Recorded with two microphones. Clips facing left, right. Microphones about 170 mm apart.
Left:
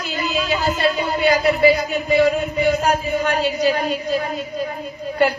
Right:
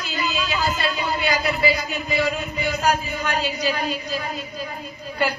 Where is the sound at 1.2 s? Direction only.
50° left (ahead or behind).